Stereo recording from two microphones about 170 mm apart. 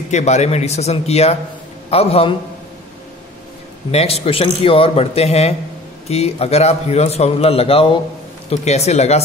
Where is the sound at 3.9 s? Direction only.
35° left (ahead or behind).